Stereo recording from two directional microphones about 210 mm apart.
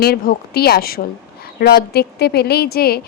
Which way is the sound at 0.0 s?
45° left (ahead or behind).